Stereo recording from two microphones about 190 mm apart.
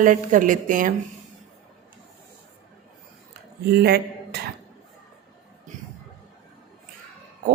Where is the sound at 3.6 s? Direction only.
55° right (ahead or behind).